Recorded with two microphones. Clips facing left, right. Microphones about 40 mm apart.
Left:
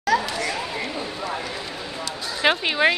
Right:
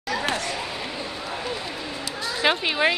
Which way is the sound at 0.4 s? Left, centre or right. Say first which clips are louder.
Left 3 dB; left.